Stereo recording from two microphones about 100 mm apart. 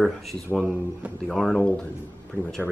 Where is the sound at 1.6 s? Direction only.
15° left (ahead or behind).